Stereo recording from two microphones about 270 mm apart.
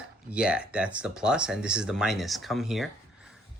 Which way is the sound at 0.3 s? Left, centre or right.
Centre.